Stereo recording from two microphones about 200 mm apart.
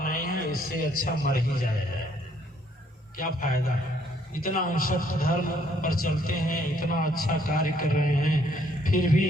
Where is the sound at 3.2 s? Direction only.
45° left (ahead or behind).